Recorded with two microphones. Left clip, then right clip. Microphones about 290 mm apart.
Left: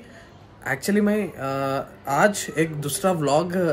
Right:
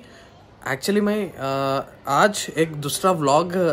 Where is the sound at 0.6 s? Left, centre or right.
Centre.